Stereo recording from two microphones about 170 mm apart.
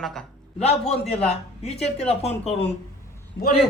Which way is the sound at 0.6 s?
40° left (ahead or behind).